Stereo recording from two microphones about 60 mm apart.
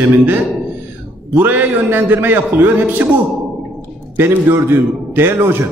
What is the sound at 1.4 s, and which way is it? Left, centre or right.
A man's voice, right.